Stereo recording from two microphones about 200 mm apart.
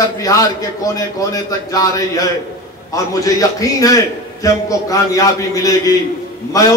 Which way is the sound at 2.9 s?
15° left (ahead or behind).